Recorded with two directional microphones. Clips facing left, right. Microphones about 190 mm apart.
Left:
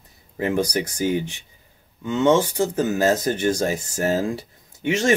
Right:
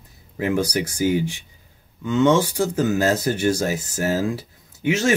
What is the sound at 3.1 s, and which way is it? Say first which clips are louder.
Speech: even; 10° right (ahead or behind).